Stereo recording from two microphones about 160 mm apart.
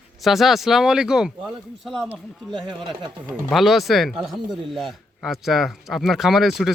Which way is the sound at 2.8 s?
30° right (ahead or behind).